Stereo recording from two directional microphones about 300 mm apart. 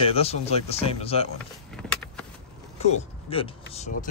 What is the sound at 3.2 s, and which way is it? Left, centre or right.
Speech, centre.